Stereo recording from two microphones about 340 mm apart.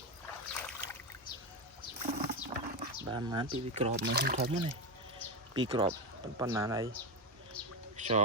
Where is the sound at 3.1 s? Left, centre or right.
Centre.